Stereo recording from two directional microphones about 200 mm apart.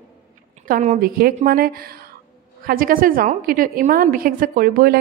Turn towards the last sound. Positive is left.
turn(degrees=-45)  # may be behind; listen again after turning